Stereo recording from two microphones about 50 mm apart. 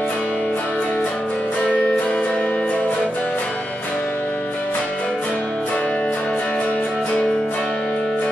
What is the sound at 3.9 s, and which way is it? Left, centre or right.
Music, centre.